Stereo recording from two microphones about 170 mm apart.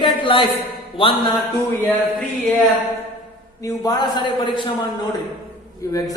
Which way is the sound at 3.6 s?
20° left (ahead or behind).